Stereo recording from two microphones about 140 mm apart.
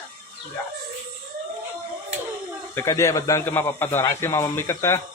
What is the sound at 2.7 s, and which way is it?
Speech, 20° left (ahead or behind).